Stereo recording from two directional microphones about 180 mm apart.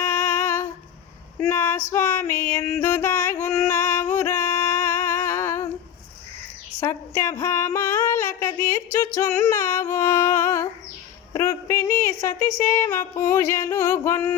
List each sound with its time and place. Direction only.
0.0 s humming: 10° left (ahead or behind)
1.4 s female singing: 10° left (ahead or behind)
6.7 s a sound: 15° left (ahead or behind)
9.1 s music: 15° left (ahead or behind)
11.3 s a sound: 15° left (ahead or behind)
13.3 s music: 15° left (ahead or behind)